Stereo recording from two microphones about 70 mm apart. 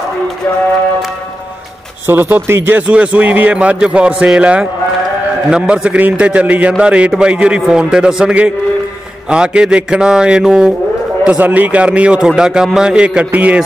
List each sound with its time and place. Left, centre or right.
2.0 s speech: right
2.9 s a man's voice: centre
11.2 s a man's voice: right